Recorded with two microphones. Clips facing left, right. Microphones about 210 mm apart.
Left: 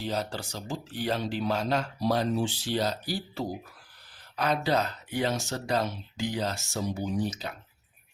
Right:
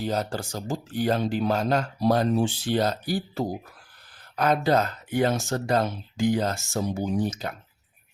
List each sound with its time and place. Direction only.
0.0 s speech: 45° right (ahead or behind)